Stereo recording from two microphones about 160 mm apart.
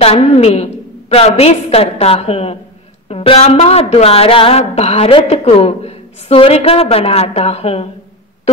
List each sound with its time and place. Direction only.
0.0 s a woman's voice: 40° left (ahead or behind)